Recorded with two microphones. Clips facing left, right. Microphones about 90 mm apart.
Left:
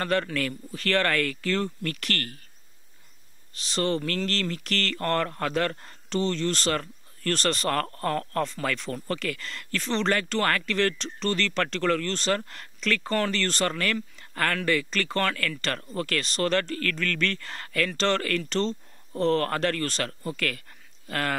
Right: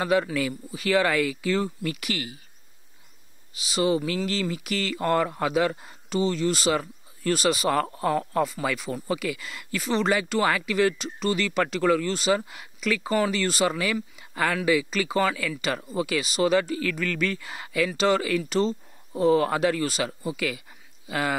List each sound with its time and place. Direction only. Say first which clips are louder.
0.0 s speech: right 3 dB; 10° right (ahead or behind)
3.5 s speech: right 3 dB; 5° right (ahead or behind)